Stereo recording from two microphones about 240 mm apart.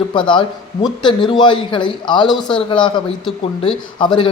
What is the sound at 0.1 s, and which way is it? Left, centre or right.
Speech, centre.